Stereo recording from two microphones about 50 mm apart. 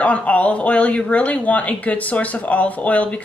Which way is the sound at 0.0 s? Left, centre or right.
Left.